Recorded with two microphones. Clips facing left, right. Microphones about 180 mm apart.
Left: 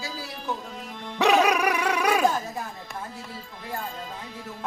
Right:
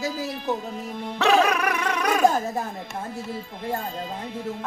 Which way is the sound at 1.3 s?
10° left (ahead or behind).